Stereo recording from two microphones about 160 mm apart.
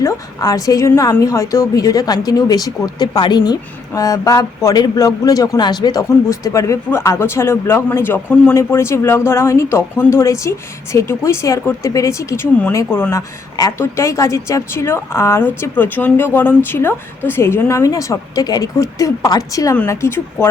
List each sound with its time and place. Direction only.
0.0 s a woman's voice: 20° left (ahead or behind)